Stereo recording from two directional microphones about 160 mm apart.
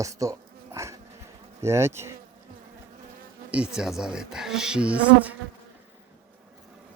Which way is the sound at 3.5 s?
5° right (ahead or behind).